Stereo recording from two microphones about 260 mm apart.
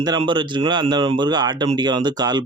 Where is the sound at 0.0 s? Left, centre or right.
Centre.